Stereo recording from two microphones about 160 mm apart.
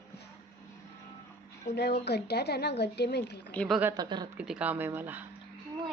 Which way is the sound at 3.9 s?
25° right (ahead or behind).